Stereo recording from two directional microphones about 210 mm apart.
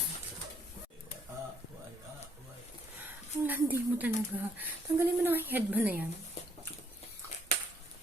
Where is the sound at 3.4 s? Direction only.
10° right (ahead or behind).